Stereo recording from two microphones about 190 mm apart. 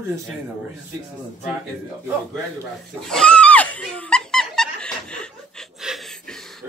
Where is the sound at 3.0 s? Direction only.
5° left (ahead or behind).